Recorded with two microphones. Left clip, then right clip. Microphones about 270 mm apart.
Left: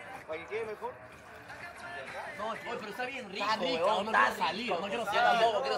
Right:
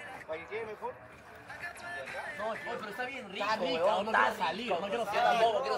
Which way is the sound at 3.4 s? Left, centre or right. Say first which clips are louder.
Even; centre.